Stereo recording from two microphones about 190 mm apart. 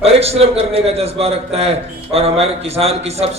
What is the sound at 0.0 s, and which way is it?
A man's voice, 30° right (ahead or behind).